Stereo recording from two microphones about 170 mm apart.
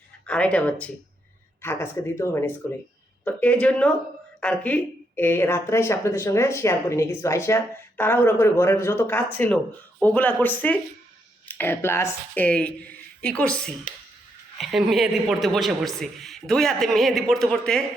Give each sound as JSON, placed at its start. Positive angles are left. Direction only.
{"t": 0.3, "sound": "a man's voice", "side_deg": 5}